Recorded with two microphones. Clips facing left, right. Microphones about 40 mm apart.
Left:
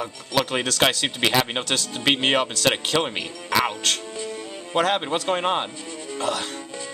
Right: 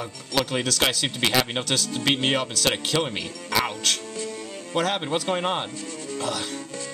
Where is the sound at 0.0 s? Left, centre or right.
Centre.